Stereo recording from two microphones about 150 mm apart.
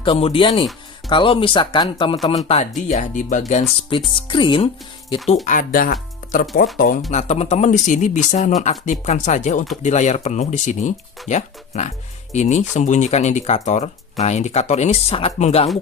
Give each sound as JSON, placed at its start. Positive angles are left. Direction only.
{"t": 0.0, "sound": "speech", "side_deg": 40}
{"t": 2.3, "sound": "speech", "side_deg": 45}
{"t": 5.5, "sound": "speech", "side_deg": 65}
{"t": 7.1, "sound": "speech", "side_deg": 45}